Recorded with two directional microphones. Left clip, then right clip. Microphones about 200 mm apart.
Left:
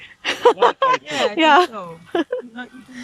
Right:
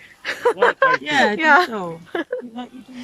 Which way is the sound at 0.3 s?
15° left (ahead or behind).